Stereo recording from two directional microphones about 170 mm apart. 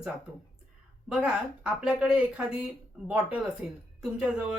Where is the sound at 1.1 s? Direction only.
5° right (ahead or behind).